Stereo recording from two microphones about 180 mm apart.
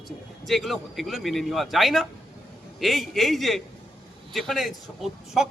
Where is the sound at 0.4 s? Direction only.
Centre (ahead or behind).